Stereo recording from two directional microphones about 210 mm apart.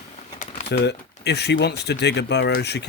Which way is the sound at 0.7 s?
55° left (ahead or behind).